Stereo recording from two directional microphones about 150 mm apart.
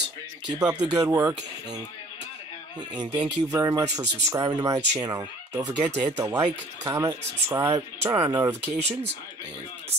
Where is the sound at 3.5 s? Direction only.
20° right (ahead or behind).